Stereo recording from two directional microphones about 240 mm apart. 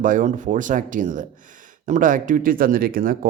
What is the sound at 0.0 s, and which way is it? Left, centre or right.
Speech, right.